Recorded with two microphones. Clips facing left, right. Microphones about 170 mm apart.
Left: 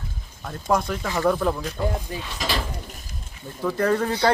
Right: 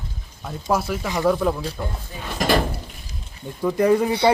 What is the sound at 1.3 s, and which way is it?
Speech, 5° right (ahead or behind).